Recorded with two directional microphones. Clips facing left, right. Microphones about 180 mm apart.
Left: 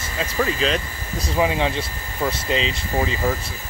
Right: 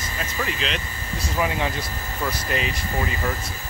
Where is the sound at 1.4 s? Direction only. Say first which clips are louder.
Left 4 dB; 20° left (ahead or behind).